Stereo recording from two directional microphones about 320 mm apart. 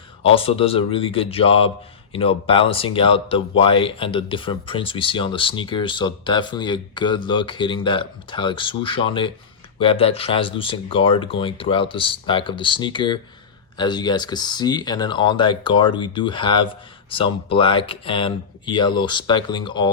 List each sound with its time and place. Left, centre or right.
0.2 s speech: centre